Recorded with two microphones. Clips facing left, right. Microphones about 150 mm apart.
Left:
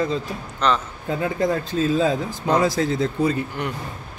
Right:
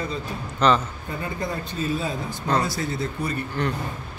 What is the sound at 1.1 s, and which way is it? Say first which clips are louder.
Speech: left 9 dB; 90° left.